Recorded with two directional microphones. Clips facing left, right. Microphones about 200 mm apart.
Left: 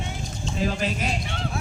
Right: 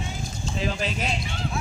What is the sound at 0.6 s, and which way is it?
Speech, 45° left (ahead or behind).